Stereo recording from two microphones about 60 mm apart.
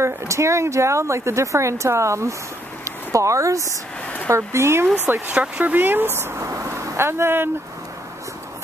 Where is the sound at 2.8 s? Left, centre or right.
Right.